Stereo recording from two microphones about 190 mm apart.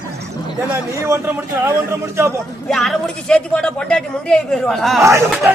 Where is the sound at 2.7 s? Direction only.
Centre (ahead or behind).